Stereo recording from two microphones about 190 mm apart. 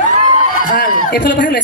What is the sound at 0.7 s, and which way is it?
Speech, 55° left (ahead or behind).